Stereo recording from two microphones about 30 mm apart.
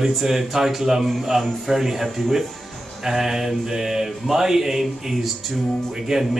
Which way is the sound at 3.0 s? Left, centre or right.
Centre.